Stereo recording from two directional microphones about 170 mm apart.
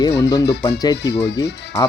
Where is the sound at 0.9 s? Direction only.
80° left.